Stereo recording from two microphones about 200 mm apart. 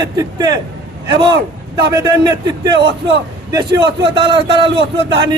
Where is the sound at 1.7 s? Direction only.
20° right (ahead or behind).